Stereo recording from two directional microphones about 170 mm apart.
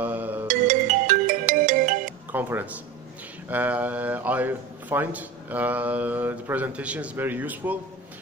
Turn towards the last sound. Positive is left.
turn(degrees=-10)  # may be behind; listen again after turning